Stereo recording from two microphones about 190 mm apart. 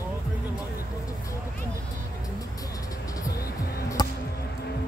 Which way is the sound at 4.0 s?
20° left (ahead or behind).